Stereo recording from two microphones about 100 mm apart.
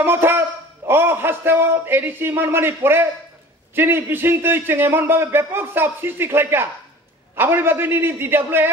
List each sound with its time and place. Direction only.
0.0 s a man's voice: 25° right (ahead or behind)